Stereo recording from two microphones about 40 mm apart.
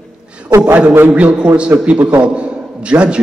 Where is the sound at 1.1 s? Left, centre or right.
Right.